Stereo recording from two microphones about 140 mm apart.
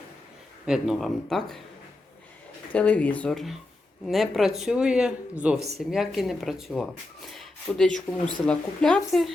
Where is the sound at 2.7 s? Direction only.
10° left (ahead or behind).